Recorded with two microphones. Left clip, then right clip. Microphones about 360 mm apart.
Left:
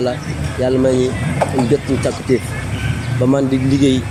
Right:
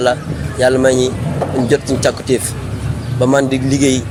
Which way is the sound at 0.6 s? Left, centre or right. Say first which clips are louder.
Right 3 dB; right.